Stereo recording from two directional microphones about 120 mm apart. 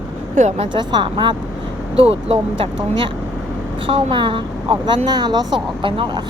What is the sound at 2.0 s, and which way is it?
A woman's voice, 50° right (ahead or behind).